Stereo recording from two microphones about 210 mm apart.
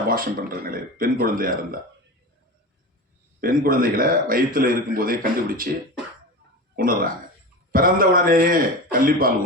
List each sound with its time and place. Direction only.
0.1 s a man's voice: 45° right (ahead or behind)
3.4 s a man's voice: 45° right (ahead or behind)
6.7 s a man's voice: 45° right (ahead or behind)